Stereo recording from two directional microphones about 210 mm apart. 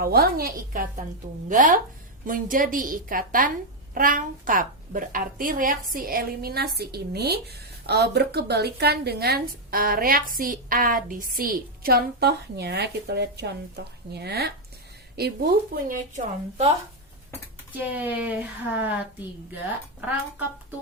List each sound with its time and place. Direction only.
0.0 s a woman's voice: 45° right (ahead or behind)
17.7 s speech: 10° right (ahead or behind)